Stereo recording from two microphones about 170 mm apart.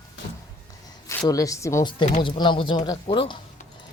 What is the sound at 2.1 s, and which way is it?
Speech, 40° left (ahead or behind).